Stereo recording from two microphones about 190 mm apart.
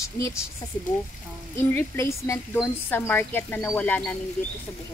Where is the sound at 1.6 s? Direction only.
15° left (ahead or behind).